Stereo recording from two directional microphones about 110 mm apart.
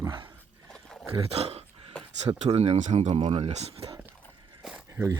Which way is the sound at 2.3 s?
65° right (ahead or behind).